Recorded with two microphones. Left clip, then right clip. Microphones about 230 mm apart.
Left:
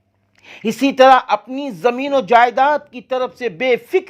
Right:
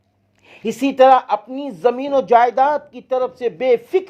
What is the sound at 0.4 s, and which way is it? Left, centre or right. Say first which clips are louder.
A man's voice: left 3 dB; left.